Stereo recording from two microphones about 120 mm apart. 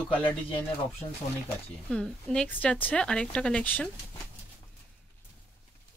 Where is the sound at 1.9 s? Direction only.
5° left (ahead or behind).